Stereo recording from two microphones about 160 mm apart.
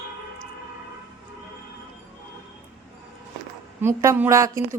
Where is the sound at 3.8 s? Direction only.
15° right (ahead or behind).